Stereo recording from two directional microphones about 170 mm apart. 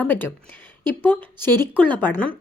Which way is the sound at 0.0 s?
10° left (ahead or behind).